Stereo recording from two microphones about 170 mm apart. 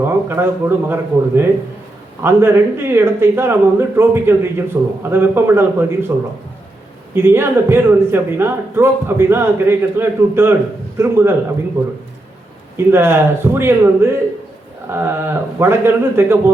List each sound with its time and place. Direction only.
0.0 s speech: 15° right (ahead or behind)
7.1 s speech: 15° right (ahead or behind)